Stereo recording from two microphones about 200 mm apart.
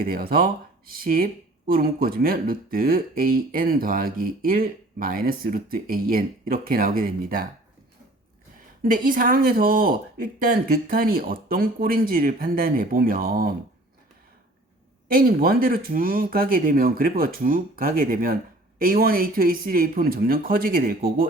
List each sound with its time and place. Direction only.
0.0 s speech: 45° right (ahead or behind)
8.8 s speech: 45° right (ahead or behind)
15.1 s speech: 45° right (ahead or behind)